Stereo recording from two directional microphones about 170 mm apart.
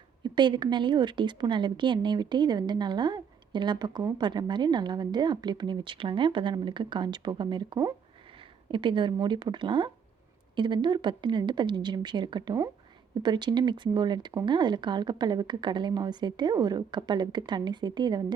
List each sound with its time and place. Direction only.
0.2 s speech: 25° right (ahead or behind)